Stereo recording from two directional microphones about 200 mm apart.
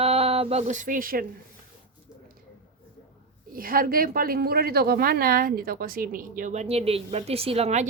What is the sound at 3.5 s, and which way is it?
A woman's voice, 45° right (ahead or behind).